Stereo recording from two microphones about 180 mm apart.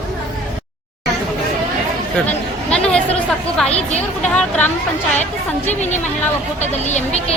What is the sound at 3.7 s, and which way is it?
Speech, 35° left (ahead or behind).